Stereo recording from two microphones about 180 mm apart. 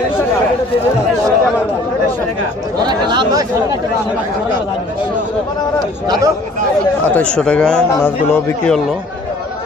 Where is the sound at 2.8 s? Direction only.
25° right (ahead or behind).